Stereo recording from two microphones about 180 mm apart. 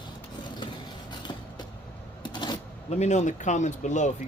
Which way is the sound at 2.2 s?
25° left (ahead or behind).